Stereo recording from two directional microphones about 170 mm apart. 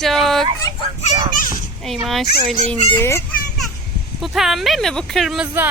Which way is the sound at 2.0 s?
Centre (ahead or behind).